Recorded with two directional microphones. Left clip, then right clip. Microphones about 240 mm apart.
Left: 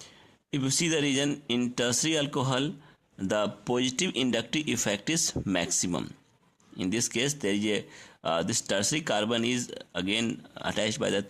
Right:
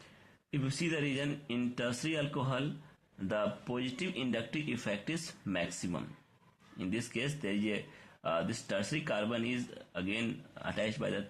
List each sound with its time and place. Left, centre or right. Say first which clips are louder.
0.5 s speech: left 8 dB; left